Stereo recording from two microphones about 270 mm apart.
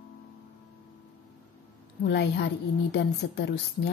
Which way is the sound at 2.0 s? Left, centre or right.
Left.